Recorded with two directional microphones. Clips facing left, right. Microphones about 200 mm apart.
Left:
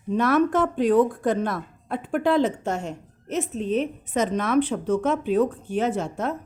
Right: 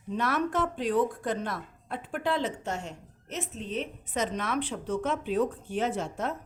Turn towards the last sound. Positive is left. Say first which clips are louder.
# left 5 dB
turn(degrees=50)  # may be behind; listen again after turning